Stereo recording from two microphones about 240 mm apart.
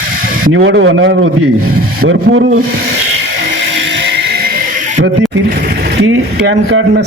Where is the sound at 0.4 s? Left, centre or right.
Right.